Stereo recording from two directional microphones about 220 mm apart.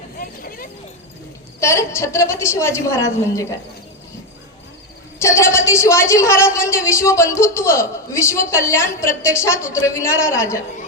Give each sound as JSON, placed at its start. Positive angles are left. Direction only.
{"t": 0.2, "sound": "vehicle", "side_deg": 40}
{"t": 1.6, "sound": "a woman's voice", "side_deg": 15}
{"t": 5.2, "sound": "a woman's voice", "side_deg": 10}